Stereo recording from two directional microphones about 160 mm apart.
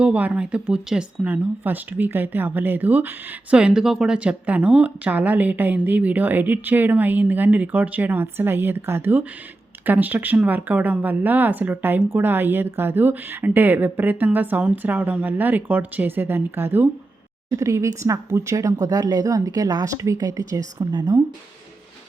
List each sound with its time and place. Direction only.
0.0 s speech: 10° right (ahead or behind)